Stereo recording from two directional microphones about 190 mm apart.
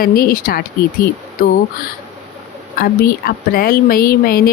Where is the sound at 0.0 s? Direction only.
50° left (ahead or behind).